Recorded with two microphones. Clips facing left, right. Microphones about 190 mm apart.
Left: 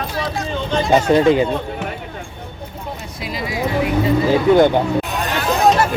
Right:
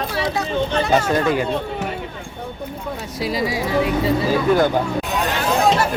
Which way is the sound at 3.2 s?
35° right (ahead or behind).